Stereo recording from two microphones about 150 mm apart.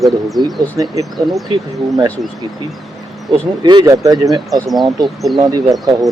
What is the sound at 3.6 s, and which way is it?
Speech, 25° right (ahead or behind).